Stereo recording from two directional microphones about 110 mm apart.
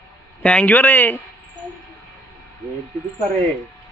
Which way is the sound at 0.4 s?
15° left (ahead or behind).